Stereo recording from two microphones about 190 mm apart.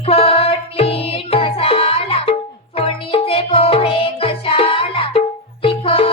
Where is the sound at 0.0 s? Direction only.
30° left (ahead or behind).